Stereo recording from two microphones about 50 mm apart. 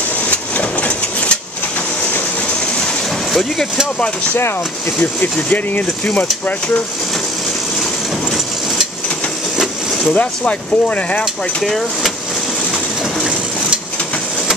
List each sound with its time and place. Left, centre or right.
0.3 s a sound: left
3.3 s speech: centre
5.2 s speech: left
10.1 s speech: left
11.6 s speech: centre